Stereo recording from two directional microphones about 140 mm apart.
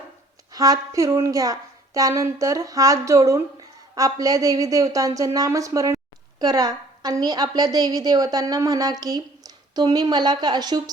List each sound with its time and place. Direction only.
0.5 s a woman's voice: 25° right (ahead or behind)